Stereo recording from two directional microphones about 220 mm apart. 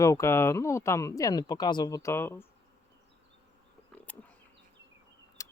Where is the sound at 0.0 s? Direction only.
15° left (ahead or behind).